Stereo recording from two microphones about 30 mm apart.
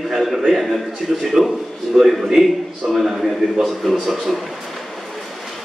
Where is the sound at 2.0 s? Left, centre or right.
Centre.